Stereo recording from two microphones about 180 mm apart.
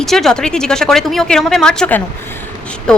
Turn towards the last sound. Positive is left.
turn(degrees=5)  # may be behind; listen again after turning